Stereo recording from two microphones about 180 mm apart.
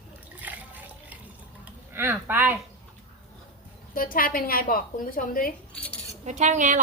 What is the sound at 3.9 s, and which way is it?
A woman's voice, 55° left (ahead or behind).